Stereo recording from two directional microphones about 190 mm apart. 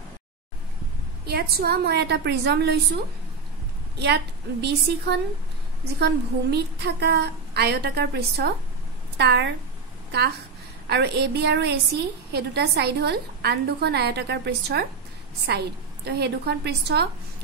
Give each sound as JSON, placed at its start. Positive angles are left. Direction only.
{"t": 1.2, "sound": "a woman's voice", "side_deg": -55}
{"t": 4.0, "sound": "a woman's voice", "side_deg": -65}
{"t": 10.9, "sound": "a woman's voice", "side_deg": -60}